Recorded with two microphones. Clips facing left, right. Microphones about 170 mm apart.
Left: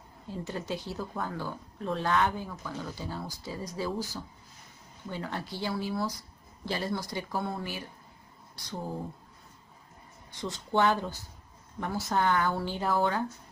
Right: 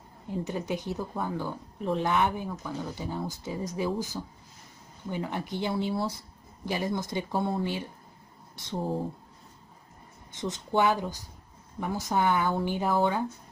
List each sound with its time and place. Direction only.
0.3 s a woman's voice: 20° right (ahead or behind)
6.6 s speech: 15° right (ahead or behind)
10.3 s a woman's voice: 20° right (ahead or behind)